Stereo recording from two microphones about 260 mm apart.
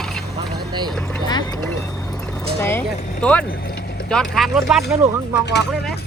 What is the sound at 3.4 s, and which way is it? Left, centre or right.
Vehicle, left.